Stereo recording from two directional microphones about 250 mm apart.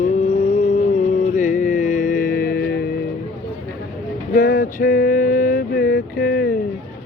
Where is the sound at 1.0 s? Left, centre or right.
Left.